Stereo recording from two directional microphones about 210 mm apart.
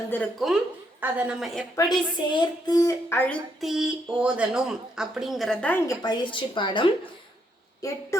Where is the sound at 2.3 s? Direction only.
20° left (ahead or behind).